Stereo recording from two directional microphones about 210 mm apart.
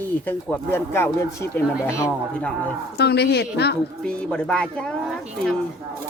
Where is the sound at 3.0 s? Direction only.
50° left (ahead or behind).